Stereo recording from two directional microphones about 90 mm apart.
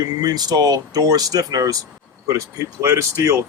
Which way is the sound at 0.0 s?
45° right (ahead or behind).